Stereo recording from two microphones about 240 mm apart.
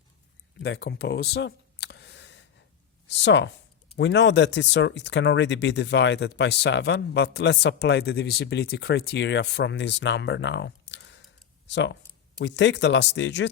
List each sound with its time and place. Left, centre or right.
0.6 s clicking: left
3.1 s speech: left